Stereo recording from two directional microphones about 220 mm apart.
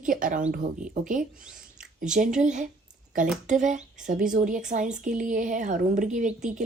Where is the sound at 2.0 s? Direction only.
35° right (ahead or behind).